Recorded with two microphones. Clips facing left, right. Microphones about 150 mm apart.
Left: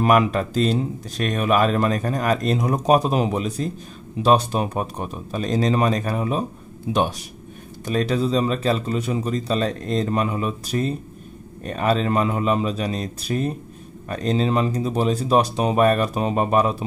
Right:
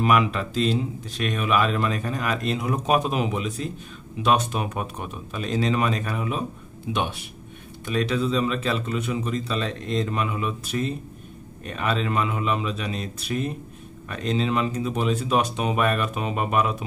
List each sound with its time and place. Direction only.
0.0 s speech: 45° left (ahead or behind)